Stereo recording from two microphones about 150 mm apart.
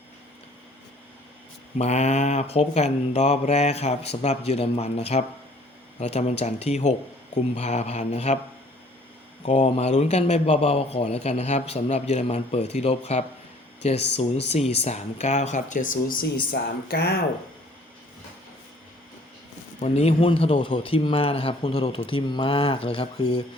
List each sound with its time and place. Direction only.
1.8 s a man's voice: 50° left (ahead or behind)
9.5 s a man's voice: 50° left (ahead or behind); by 17.2 s 90° left
19.8 s speech: 45° left (ahead or behind)